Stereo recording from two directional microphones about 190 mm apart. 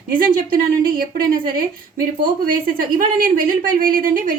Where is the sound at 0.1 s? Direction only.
45° right (ahead or behind).